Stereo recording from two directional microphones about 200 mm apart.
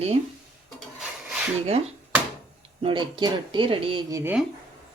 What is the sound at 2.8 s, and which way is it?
Speech, 25° right (ahead or behind).